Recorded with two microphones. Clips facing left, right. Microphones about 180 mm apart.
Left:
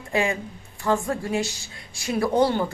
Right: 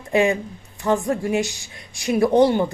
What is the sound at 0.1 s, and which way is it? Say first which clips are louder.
Speech: right 6 dB; 20° right (ahead or behind).